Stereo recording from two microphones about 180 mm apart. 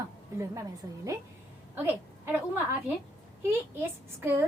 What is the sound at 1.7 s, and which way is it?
A woman's voice, 10° right (ahead or behind).